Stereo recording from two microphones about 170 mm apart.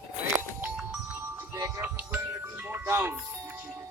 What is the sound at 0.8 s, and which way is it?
Music, 5° right (ahead or behind).